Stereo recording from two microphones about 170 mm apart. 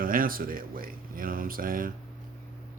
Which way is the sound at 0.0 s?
55° right (ahead or behind).